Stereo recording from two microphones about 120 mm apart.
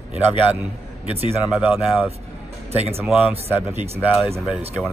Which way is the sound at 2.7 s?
60° right (ahead or behind).